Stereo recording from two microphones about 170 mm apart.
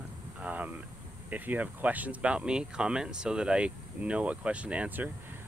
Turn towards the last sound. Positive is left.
turn(degrees=-10)  # may be behind; listen again after turning